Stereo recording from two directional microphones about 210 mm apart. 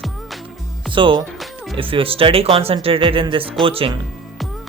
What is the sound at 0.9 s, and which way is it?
Speech, 25° right (ahead or behind).